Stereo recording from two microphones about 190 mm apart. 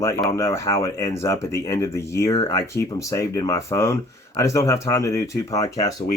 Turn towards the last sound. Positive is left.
turn(degrees=20)  # may be behind; listen again after turning